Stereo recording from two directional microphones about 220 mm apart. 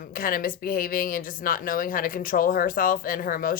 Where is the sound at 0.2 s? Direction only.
40° left (ahead or behind).